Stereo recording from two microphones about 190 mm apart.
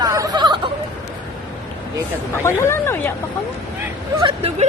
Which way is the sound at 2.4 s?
15° left (ahead or behind).